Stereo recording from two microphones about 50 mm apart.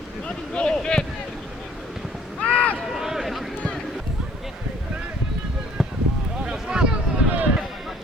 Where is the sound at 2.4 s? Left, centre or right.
Left.